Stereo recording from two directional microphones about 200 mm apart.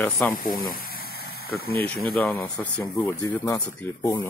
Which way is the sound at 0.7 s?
45° left (ahead or behind).